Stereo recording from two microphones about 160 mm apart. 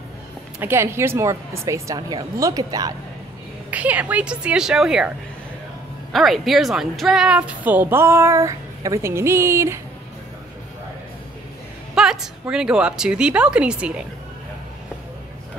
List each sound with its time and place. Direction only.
0.6 s speech: 15° right (ahead or behind)
3.7 s a woman's voice: 10° right (ahead or behind)
6.1 s a woman's voice: centre (ahead or behind); by 9.8 s 15° right (ahead or behind)
11.9 s a woman's voice: 5° right (ahead or behind)